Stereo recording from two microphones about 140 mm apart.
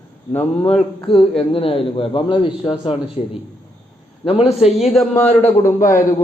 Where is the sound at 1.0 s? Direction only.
40° left (ahead or behind).